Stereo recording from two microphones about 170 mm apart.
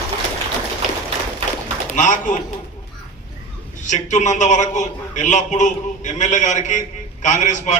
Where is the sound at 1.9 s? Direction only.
50° left (ahead or behind).